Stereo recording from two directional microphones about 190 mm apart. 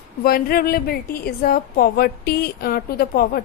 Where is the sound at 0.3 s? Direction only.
50° left (ahead or behind).